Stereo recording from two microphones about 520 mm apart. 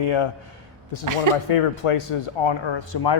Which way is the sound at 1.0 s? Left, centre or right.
Right.